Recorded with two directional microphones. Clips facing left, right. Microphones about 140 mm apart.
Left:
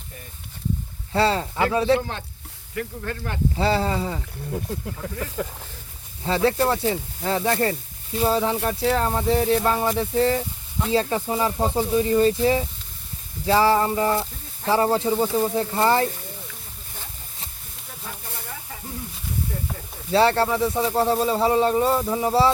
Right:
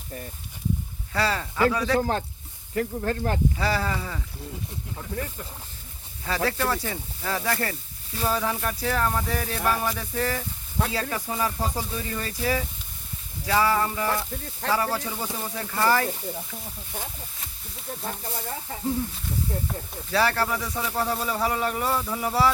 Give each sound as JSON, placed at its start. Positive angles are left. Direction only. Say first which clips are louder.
{"t": 1.1, "sound": "speech", "louder": "left 5 dB", "side_deg": 30}
{"t": 2.0, "sound": "speech", "louder": "right 5 dB", "side_deg": -40}
{"t": 3.6, "sound": "speech", "louder": "left 5 dB", "side_deg": 30}
{"t": 4.5, "sound": "speech", "louder": "left 9 dB", "side_deg": 80}
{"t": 6.2, "sound": "speech", "louder": "left 6 dB", "side_deg": 30}
{"t": 18.7, "sound": "snake", "louder": "right 3 dB", "side_deg": -30}
{"t": 20.1, "sound": "speech", "louder": "left 6 dB", "side_deg": 25}